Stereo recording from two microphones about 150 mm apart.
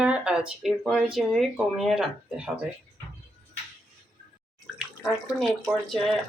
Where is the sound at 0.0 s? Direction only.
5° right (ahead or behind).